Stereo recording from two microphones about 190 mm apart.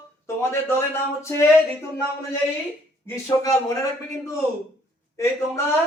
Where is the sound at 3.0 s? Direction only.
15° left (ahead or behind).